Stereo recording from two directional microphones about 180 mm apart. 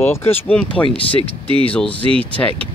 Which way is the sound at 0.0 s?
10° left (ahead or behind).